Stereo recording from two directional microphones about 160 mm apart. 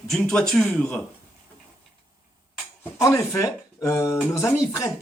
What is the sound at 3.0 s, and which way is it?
Speech, 20° left (ahead or behind).